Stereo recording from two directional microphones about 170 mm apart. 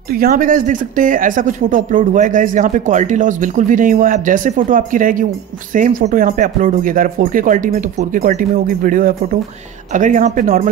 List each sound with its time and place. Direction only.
0.1 s speech: 60° right (ahead or behind)